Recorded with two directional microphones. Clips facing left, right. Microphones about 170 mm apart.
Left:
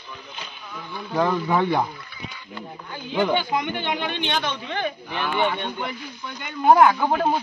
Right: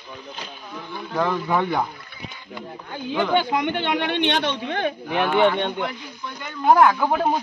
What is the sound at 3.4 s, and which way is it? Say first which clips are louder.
A man's voice: right 3 dB; 65° right (ahead or behind).